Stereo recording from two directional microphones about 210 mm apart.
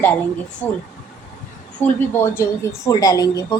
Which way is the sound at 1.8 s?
10° left (ahead or behind).